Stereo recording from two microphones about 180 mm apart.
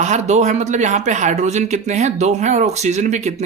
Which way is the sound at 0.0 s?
40° right (ahead or behind).